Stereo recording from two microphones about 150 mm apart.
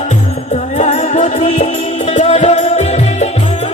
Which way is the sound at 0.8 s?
50° left (ahead or behind).